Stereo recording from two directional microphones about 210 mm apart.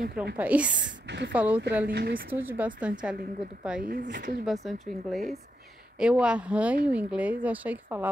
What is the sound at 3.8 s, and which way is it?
Speech, 45° right (ahead or behind).